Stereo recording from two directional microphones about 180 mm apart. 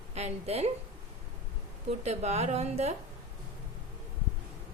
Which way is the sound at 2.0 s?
35° right (ahead or behind).